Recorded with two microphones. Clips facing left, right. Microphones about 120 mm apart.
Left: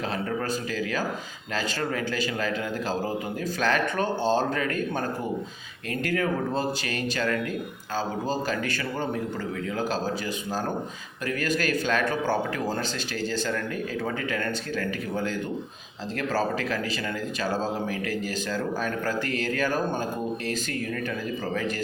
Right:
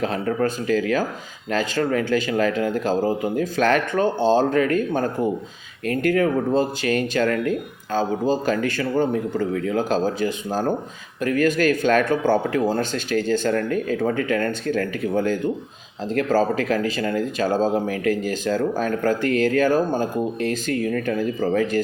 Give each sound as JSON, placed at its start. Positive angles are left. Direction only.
{"t": 0.0, "sound": "speech", "side_deg": -45}
{"t": 11.2, "sound": "speech", "side_deg": -45}